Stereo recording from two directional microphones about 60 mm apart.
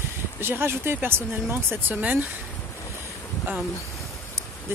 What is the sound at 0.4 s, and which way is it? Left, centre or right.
Speech, right.